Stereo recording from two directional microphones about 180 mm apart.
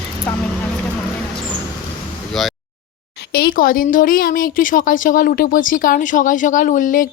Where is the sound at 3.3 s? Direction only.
55° left (ahead or behind).